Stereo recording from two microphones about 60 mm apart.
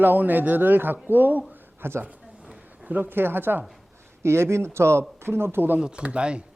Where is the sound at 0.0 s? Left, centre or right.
Right.